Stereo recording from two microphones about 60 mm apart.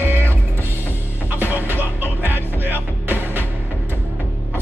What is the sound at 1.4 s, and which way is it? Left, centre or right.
Music, right.